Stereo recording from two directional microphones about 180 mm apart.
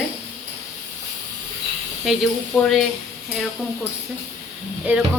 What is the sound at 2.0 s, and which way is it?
Speech, centre (ahead or behind).